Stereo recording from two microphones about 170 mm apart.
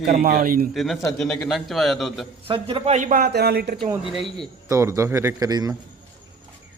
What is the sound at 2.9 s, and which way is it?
Speech, 45° right (ahead or behind).